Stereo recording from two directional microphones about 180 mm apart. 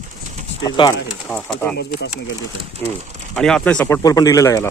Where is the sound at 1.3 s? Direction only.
10° left (ahead or behind).